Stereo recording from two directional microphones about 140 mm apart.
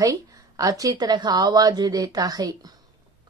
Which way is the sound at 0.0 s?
25° right (ahead or behind).